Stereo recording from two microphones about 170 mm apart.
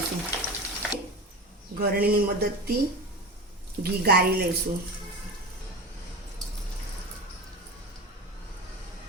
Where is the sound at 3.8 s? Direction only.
70° right (ahead or behind).